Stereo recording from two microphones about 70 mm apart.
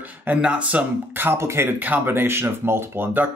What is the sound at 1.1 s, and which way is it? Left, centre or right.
Speech, right.